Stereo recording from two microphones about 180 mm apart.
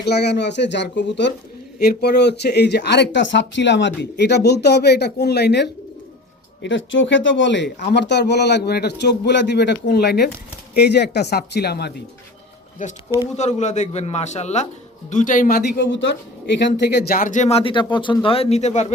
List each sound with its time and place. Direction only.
0.0 s speech: 65° left (ahead or behind)
1.8 s speech: 65° left (ahead or behind)
6.6 s speech: 90° left; by 11.9 s 65° left (ahead or behind)
12.8 s a man's voice: 45° left (ahead or behind)